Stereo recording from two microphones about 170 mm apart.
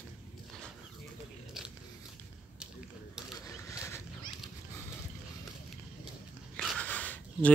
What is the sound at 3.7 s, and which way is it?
Wild animals, 15° left (ahead or behind).